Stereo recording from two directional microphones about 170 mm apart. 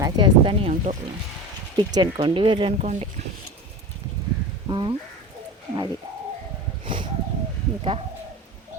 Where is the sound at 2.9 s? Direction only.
40° right (ahead or behind).